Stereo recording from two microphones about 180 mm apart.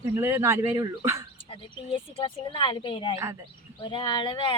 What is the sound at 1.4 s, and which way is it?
Speech, 30° left (ahead or behind).